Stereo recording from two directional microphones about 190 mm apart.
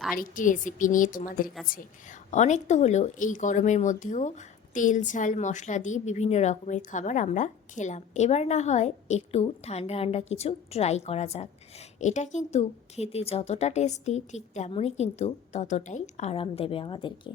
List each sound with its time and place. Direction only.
0.2 s a woman's voice: 45° left (ahead or behind); by 17.3 s 25° left (ahead or behind)